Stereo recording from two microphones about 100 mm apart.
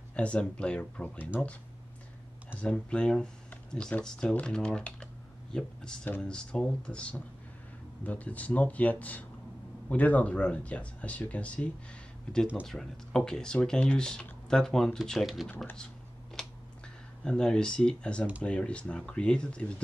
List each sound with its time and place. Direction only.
0.1 s speech: 10° left (ahead or behind)
2.5 s speech: 10° left (ahead or behind)
6.0 s speech: 20° left (ahead or behind); by 15.4 s centre (ahead or behind)
16.4 s a sound: 5° left (ahead or behind)
17.2 s speech: 5° left (ahead or behind)